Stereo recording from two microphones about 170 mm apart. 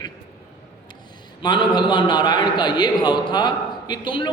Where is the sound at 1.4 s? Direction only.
25° left (ahead or behind).